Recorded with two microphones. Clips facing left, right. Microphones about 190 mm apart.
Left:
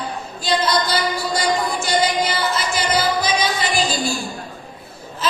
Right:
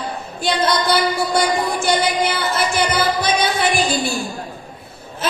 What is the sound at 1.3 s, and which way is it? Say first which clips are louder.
Music: right 2 dB; 55° right (ahead or behind).